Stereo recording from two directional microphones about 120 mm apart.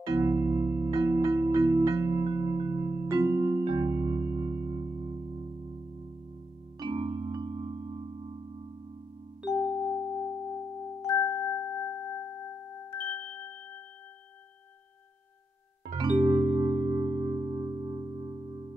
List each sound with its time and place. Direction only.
0.1 s music: 20° right (ahead or behind)
6.8 s music: 50° right (ahead or behind)
7.2 s music: 40° right (ahead or behind)
9.7 s music: centre (ahead or behind)
11.1 s music: 40° left (ahead or behind); by 13.6 s 15° left (ahead or behind)
16.0 s music: 35° right (ahead or behind)